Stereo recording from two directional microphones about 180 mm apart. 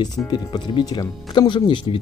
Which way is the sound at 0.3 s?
25° left (ahead or behind).